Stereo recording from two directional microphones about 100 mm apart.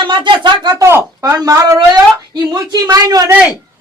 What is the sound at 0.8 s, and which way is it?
Speech, 30° right (ahead or behind).